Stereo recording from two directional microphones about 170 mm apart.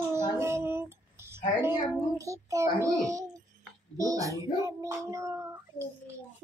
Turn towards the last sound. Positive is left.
turn(degrees=-15)  # may be behind; listen again after turning